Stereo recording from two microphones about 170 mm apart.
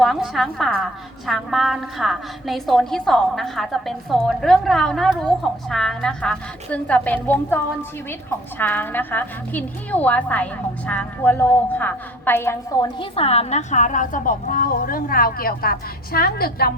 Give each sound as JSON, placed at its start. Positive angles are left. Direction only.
{"t": 0.0, "sound": "a woman's voice", "side_deg": 0}
{"t": 13.0, "sound": "a woman's voice", "side_deg": 35}